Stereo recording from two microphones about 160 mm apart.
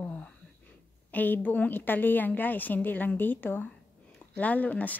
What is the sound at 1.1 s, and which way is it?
A woman's voice, 10° left (ahead or behind).